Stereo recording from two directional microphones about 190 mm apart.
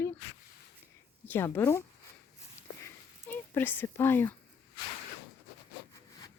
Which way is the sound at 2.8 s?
10° left (ahead or behind).